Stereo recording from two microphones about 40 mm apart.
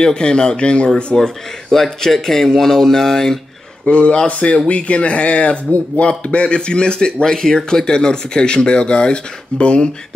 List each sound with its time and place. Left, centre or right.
0.0 s speech: centre
1.1 s speech: centre
3.8 s speech: left